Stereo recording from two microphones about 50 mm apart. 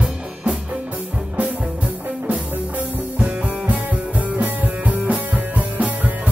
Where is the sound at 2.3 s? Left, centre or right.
Right.